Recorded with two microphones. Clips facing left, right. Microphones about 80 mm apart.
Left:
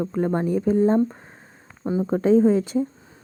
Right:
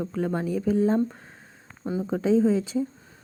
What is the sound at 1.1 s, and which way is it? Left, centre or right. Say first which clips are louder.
Speech: left 3 dB; left.